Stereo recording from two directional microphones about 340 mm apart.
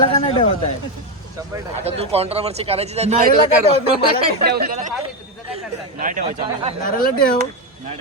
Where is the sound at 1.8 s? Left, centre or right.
Centre.